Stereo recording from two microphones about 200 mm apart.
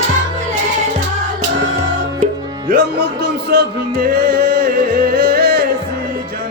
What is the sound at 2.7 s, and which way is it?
Speech, 55° right (ahead or behind).